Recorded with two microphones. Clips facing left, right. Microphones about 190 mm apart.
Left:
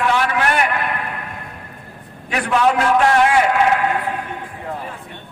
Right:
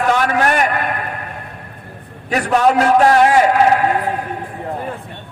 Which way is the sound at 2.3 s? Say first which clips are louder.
Right 3 dB; 40° right (ahead or behind).